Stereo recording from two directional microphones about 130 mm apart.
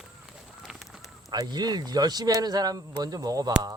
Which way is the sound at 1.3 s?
30° right (ahead or behind).